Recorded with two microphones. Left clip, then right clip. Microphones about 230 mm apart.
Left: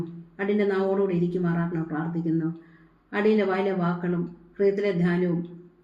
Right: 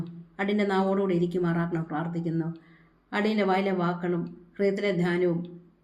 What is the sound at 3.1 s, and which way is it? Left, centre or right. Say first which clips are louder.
A woman's voice: left 3 dB; right.